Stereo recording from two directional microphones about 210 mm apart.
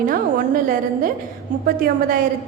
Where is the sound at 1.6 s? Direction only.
45° right (ahead or behind).